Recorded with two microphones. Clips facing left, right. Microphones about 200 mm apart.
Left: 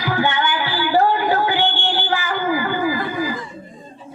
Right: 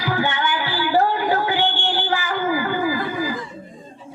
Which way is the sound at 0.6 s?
65° left (ahead or behind).